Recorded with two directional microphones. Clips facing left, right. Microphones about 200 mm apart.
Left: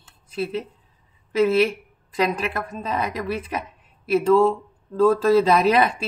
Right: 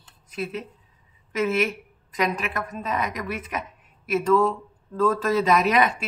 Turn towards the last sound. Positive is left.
turn(degrees=30)  # may be behind; listen again after turning